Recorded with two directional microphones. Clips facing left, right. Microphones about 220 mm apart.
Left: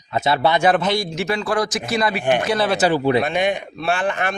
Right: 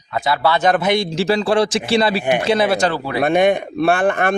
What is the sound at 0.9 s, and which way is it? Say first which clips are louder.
A man's voice: right 5 dB; 30° right (ahead or behind).